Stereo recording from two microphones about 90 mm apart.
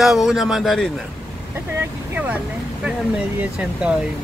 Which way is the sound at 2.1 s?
15° right (ahead or behind).